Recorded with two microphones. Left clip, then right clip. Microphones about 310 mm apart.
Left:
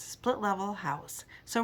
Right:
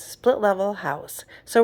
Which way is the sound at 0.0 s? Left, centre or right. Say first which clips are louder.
Right 11 dB; centre.